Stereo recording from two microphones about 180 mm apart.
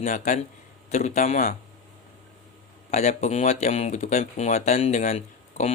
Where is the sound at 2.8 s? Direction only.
40° left (ahead or behind).